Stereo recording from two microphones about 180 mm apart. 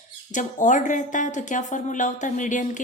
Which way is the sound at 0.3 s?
45° left (ahead or behind).